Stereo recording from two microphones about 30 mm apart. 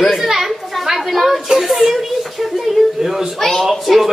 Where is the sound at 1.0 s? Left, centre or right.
Centre.